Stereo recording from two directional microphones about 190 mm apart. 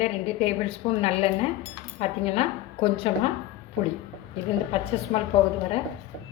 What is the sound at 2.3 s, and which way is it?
Speech, 30° left (ahead or behind).